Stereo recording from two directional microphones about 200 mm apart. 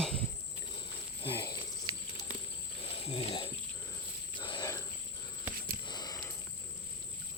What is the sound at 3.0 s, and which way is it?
Speech, 30° left (ahead or behind).